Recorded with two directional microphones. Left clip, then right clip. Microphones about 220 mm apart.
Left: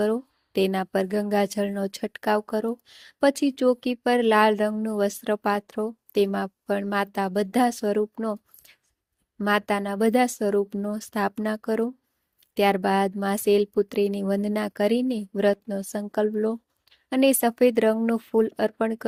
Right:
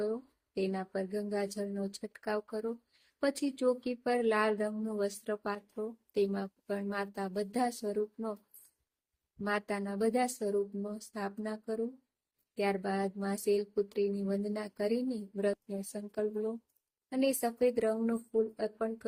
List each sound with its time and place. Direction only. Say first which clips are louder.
0.0 s speech: left 11 dB; 40° left (ahead or behind)
9.4 s speech: left 11 dB; 35° left (ahead or behind)